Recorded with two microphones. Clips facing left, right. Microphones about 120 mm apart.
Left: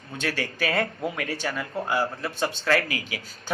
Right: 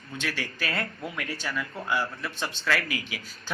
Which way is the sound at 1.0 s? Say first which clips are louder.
Left 5 dB; 40° left (ahead or behind).